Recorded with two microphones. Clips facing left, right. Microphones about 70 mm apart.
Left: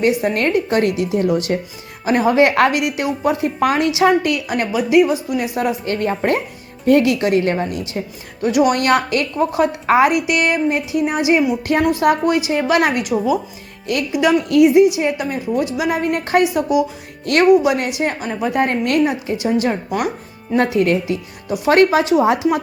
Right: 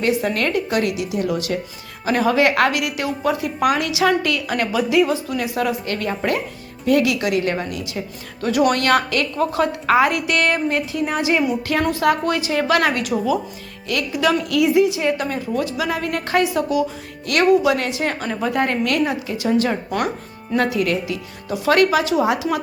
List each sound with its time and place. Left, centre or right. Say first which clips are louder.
0.0 s a woman's voice: left 3 dB; left
8.4 s a woman's voice: left 3 dB; centre
18.7 s speech: left 3 dB; left
19.4 s speech: even; centre
20.6 s a woman's voice: left 4 dB; left